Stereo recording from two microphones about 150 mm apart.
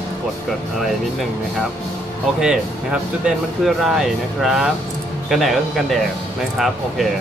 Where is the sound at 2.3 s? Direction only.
5° right (ahead or behind).